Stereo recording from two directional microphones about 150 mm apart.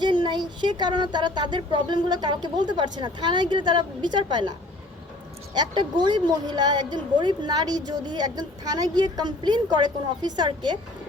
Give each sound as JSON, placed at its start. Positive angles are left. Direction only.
{"t": 0.0, "sound": "speech", "side_deg": -30}
{"t": 5.5, "sound": "speech", "side_deg": -30}